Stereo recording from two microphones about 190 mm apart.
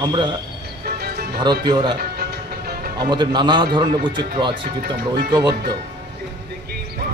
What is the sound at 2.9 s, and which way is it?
A man's voice, 25° right (ahead or behind).